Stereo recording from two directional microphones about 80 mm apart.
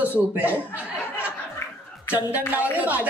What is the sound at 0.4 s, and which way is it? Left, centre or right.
Speech, centre.